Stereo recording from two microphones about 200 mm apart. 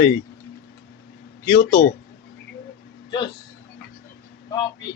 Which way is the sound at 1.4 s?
30° left (ahead or behind).